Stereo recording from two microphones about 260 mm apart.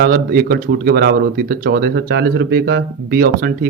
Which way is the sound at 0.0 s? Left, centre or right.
Right.